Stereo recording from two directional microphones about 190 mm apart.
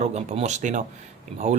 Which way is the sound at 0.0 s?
35° right (ahead or behind).